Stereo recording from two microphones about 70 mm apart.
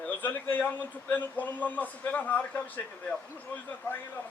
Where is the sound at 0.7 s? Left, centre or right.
Left.